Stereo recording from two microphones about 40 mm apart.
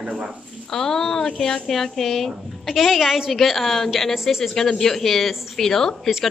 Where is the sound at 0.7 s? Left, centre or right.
Centre.